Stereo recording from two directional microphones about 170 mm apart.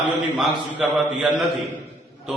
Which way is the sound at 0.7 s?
5° right (ahead or behind).